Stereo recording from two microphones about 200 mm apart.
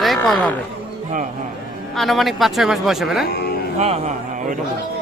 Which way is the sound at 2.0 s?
Centre (ahead or behind).